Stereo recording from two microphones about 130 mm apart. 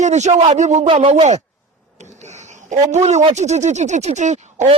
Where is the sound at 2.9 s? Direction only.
60° right (ahead or behind).